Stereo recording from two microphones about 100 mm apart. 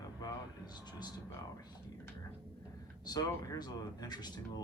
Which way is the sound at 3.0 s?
40° left (ahead or behind).